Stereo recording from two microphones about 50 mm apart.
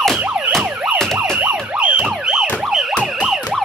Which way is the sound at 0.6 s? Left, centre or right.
Right.